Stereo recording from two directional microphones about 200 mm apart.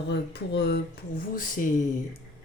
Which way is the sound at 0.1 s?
60° left (ahead or behind).